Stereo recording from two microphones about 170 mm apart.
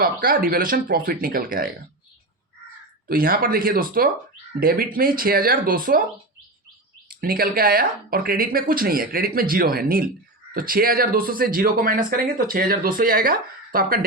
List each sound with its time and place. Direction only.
0.0 s speech: 55° right (ahead or behind)
3.1 s speech: 60° right (ahead or behind)
7.1 s speech: 60° right (ahead or behind)